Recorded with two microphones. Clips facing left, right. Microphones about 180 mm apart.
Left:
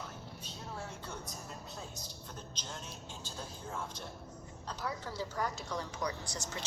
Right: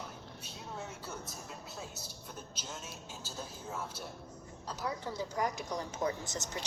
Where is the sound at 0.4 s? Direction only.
5° right (ahead or behind).